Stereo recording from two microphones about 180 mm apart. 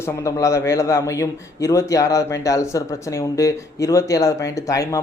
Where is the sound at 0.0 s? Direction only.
15° left (ahead or behind).